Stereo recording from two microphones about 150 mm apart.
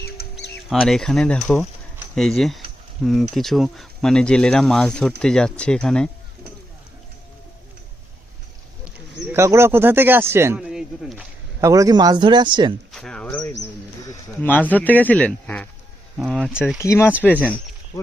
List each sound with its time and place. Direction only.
0.2 s bird: 90° left
0.7 s speech: centre (ahead or behind)
9.3 s speech: 15° right (ahead or behind)
10.6 s a sound: 5° right (ahead or behind)
11.6 s speech: 20° right (ahead or behind)
12.9 s a sound: 5° left (ahead or behind)
14.0 s a sound: 15° left (ahead or behind)
14.7 s speech: 10° left (ahead or behind)
16.3 s speech: centre (ahead or behind)
16.7 s speech: 20° left (ahead or behind)